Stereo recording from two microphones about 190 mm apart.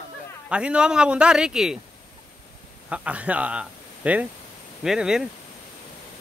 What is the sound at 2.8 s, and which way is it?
Speech, 5° right (ahead or behind).